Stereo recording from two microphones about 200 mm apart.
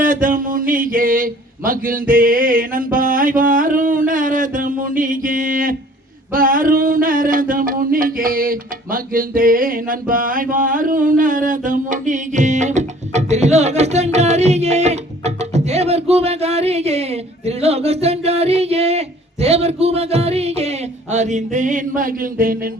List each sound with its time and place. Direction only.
0.0 s speech: 40° right (ahead or behind)